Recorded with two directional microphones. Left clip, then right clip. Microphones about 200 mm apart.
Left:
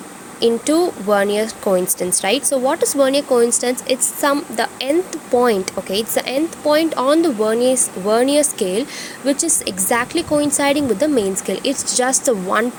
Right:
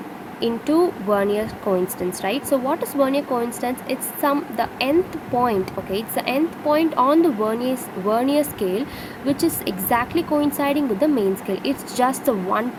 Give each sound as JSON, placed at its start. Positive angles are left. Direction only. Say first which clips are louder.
{"t": 0.3, "sound": "speech", "louder": "left 4 dB", "side_deg": 25}